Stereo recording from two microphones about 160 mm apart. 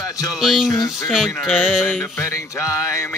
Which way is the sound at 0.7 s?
20° left (ahead or behind).